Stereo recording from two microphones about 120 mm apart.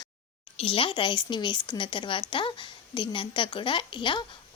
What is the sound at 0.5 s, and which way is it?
A woman's voice, 45° left (ahead or behind).